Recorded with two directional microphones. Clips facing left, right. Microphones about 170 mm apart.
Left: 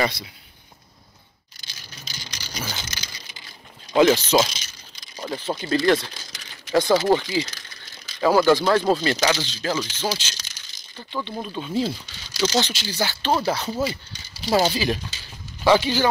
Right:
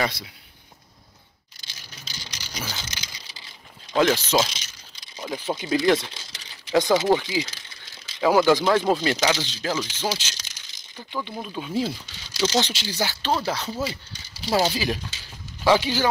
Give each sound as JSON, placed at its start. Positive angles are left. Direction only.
{"t": 0.0, "sound": "speech", "side_deg": 0}
{"t": 1.6, "sound": "a sound", "side_deg": -25}
{"t": 3.9, "sound": "speech", "side_deg": 0}
{"t": 4.5, "sound": "a sound", "side_deg": -25}
{"t": 5.2, "sound": "a sound", "side_deg": -10}
{"t": 5.6, "sound": "speech", "side_deg": -15}
{"t": 7.2, "sound": "speech", "side_deg": -5}
{"t": 9.8, "sound": "a sound", "side_deg": -15}
{"t": 11.1, "sound": "speech", "side_deg": -5}
{"t": 12.4, "sound": "speech", "side_deg": -25}
{"t": 12.9, "sound": "speech", "side_deg": -10}
{"t": 13.3, "sound": "speech", "side_deg": 10}
{"t": 14.4, "sound": "speech", "side_deg": -5}